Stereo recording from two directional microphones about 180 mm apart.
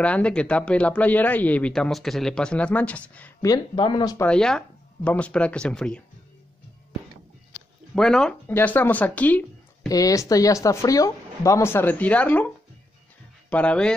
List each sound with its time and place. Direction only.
0.0 s speech: 5° left (ahead or behind)
3.4 s speech: 25° left (ahead or behind)
4.3 s speech: 5° left (ahead or behind)
7.9 s speech: 5° left (ahead or behind)
9.8 s speech: 20° left (ahead or behind)
13.5 s speech: 5° left (ahead or behind)